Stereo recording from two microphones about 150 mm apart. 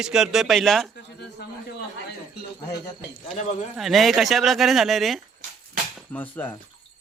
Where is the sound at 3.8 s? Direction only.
Centre (ahead or behind).